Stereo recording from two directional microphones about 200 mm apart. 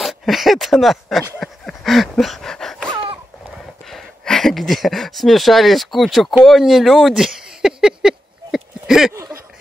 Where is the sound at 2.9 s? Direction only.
25° right (ahead or behind).